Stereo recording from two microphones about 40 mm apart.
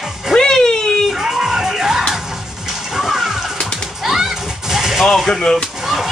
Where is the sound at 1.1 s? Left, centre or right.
Centre.